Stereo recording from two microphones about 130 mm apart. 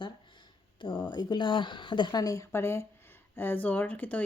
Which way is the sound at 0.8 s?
40° left (ahead or behind).